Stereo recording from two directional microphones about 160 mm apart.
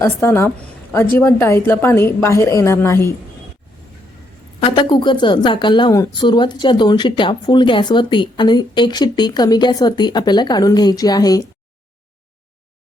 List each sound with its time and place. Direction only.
0.0 s a woman's voice: 15° left (ahead or behind)
4.6 s speech: 30° left (ahead or behind)